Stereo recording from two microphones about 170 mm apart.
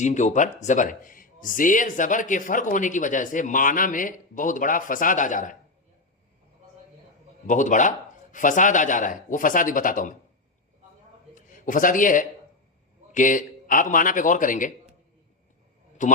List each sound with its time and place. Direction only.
0.0 s speech: 45° left (ahead or behind)
7.4 s speech: 50° left (ahead or behind)
11.3 s a man's voice: 50° left (ahead or behind)
16.0 s speech: 50° left (ahead or behind)